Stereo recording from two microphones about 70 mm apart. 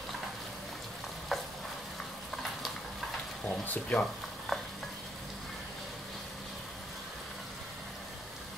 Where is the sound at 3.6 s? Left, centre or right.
Left.